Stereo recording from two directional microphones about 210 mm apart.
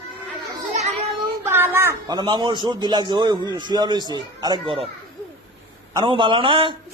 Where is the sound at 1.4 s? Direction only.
10° right (ahead or behind).